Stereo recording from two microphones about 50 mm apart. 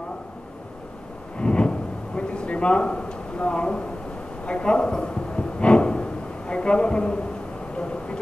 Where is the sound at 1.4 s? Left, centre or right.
Centre.